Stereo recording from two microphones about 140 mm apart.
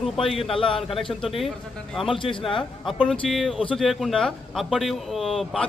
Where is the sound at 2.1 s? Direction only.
35° left (ahead or behind).